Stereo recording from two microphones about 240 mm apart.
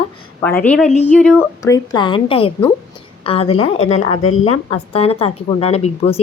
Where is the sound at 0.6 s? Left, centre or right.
Centre.